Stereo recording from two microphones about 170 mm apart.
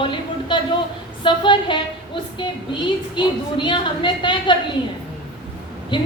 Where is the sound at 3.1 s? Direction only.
30° left (ahead or behind).